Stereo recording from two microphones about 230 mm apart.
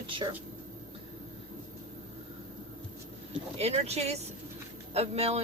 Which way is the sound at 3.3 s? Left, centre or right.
Right.